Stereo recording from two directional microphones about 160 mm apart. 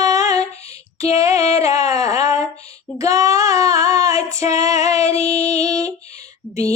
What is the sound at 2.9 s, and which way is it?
Child singing, 20° right (ahead or behind).